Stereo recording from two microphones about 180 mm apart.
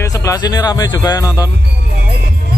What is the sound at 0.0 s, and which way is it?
Speech, 20° left (ahead or behind).